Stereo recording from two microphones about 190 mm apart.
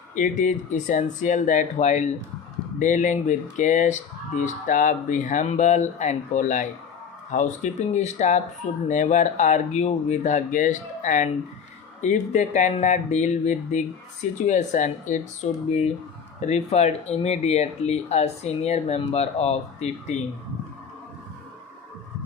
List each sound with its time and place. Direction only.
0.2 s speech: 40° left (ahead or behind)